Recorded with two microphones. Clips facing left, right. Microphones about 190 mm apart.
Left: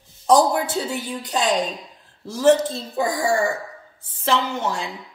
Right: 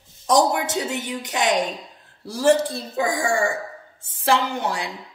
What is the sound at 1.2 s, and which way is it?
A woman's voice, 20° right (ahead or behind).